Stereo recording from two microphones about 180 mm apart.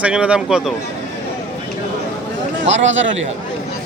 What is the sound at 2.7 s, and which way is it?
Speech, 90° right.